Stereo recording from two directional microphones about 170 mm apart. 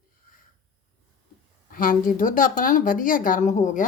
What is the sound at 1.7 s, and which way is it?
A woman's voice, 55° left (ahead or behind).